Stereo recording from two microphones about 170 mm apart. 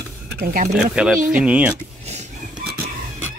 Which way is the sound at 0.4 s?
60° right (ahead or behind).